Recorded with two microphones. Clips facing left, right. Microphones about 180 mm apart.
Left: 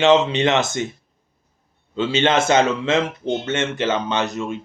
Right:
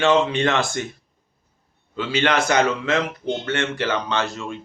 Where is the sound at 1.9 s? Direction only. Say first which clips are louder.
Left 3 dB; 25° left (ahead or behind).